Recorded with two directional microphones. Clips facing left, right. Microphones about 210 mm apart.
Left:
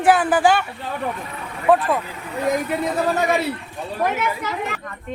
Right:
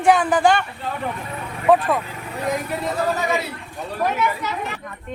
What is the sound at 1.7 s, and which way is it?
Speech, centre (ahead or behind).